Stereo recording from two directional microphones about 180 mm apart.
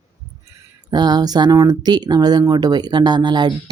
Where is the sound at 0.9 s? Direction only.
20° right (ahead or behind).